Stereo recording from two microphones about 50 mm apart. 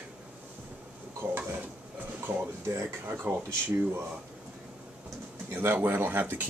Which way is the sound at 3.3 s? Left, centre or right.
Right.